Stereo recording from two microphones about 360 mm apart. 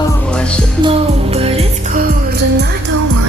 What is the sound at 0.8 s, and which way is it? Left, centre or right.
Music, centre.